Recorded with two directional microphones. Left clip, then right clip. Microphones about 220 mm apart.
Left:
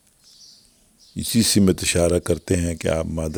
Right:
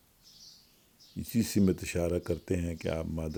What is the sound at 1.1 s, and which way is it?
Speech, 40° left (ahead or behind).